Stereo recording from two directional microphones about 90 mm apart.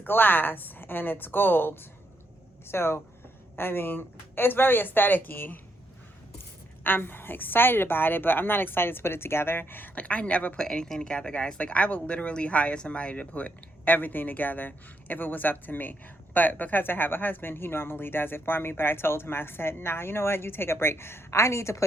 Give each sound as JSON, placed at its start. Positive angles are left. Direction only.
{"t": 0.0, "sound": "a woman's voice", "side_deg": 20}
{"t": 6.8, "sound": "a woman's voice", "side_deg": 20}